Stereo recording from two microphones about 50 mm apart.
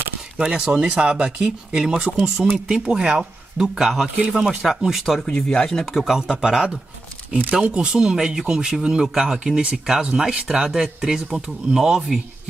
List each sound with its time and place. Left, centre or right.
0.4 s speech: centre
5.2 s speech: centre
5.9 s speech: centre